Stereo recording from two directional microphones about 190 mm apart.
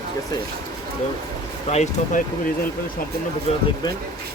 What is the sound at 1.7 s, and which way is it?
Speech, 35° left (ahead or behind).